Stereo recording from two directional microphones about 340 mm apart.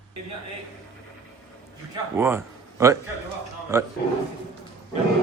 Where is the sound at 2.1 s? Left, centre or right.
Centre.